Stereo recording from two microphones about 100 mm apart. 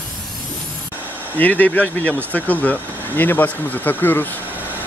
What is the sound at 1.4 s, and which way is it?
Speech, 15° left (ahead or behind).